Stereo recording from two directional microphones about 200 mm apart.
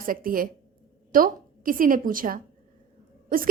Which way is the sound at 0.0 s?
45° right (ahead or behind).